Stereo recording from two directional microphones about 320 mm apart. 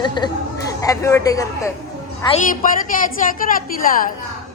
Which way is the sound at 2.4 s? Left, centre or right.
Left.